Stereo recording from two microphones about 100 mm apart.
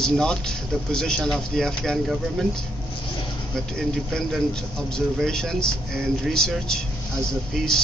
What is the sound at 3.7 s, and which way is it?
Speech, 5° left (ahead or behind).